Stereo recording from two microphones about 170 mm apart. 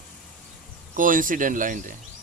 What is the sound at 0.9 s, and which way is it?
Speech, 50° right (ahead or behind).